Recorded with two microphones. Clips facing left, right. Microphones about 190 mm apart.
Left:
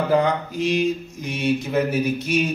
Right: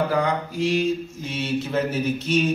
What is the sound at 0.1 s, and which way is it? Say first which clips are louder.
A man's voice: left 4 dB; 20° left (ahead or behind).